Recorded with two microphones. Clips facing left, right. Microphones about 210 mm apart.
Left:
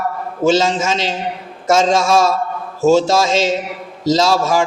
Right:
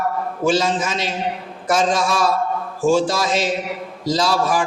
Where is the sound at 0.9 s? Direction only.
90° left.